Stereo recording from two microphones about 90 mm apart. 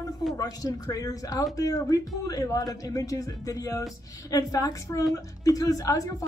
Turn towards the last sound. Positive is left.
turn(degrees=40)  # may be behind; listen again after turning